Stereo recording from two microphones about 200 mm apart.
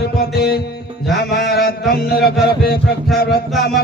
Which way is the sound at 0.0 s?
50° left (ahead or behind).